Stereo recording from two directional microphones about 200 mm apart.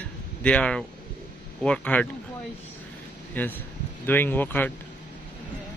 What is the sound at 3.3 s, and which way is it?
A man's voice, 10° left (ahead or behind).